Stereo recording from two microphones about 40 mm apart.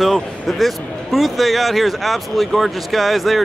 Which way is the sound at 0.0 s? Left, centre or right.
Centre.